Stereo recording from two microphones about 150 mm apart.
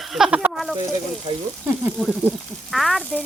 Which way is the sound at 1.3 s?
35° right (ahead or behind).